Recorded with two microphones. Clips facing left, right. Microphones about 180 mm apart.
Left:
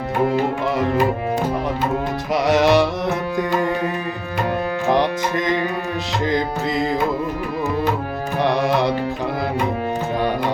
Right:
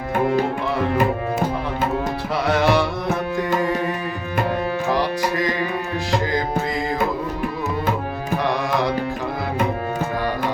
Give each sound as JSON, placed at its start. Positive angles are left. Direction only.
{"t": 2.3, "sound": "music", "side_deg": 20}
{"t": 4.9, "sound": "music", "side_deg": 20}